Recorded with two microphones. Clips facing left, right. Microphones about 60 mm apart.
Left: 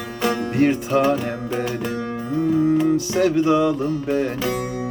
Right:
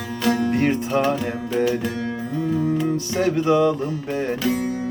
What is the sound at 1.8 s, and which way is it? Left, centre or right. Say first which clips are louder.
Music: even; left.